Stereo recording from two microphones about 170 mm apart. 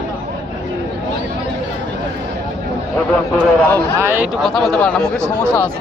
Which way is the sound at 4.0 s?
10° right (ahead or behind).